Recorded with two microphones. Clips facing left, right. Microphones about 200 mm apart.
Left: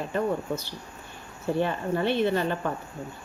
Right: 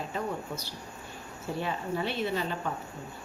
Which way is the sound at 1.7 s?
60° left (ahead or behind).